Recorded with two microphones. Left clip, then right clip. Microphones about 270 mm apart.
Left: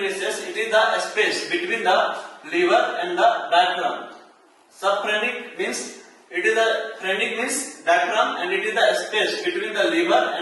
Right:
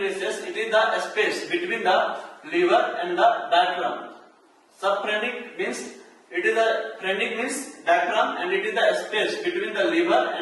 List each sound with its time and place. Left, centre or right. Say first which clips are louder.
0.0 s a man's voice: left 2 dB; centre